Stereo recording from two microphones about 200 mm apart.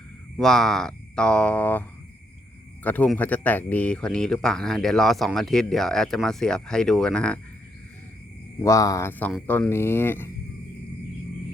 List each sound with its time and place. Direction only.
0.3 s speech: centre (ahead or behind)
2.8 s speech: 10° left (ahead or behind)
8.6 s speech: 15° left (ahead or behind)